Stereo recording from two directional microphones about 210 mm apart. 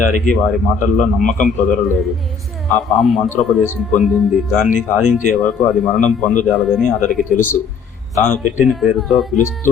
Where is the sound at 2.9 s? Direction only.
Centre (ahead or behind).